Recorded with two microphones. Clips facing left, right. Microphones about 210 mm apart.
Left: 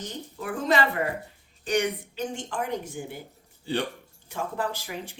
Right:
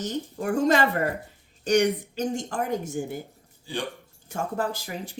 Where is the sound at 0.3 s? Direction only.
45° right (ahead or behind).